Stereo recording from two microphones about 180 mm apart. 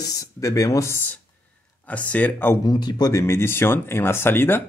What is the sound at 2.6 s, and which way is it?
Speech, 25° left (ahead or behind).